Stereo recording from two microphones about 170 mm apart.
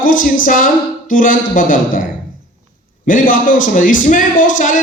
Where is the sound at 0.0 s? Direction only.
55° left (ahead or behind).